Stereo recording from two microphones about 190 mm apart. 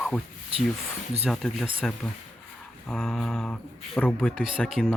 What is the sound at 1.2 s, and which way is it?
Speech, centre (ahead or behind).